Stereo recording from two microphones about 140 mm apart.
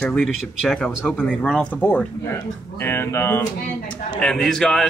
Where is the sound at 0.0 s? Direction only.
5° left (ahead or behind).